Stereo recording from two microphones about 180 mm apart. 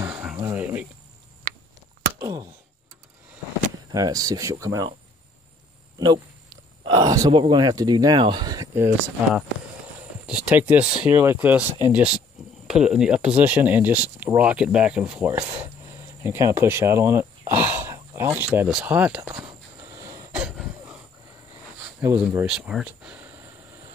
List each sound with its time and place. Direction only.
0.0 s a sound: 5° right (ahead or behind)
2.1 s a sound: 20° right (ahead or behind)
3.9 s speech: 20° right (ahead or behind)
6.9 s speech: 20° right (ahead or behind)
10.2 s speech: 5° right (ahead or behind)
19.9 s cough: 20° right (ahead or behind)
20.3 s cough: 5° right (ahead or behind)
22.0 s speech: 10° right (ahead or behind)